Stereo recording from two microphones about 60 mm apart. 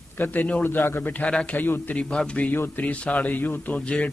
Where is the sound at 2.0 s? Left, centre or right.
Centre.